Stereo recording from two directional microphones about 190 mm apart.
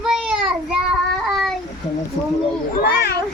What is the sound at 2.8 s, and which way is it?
Children playing, 55° left (ahead or behind).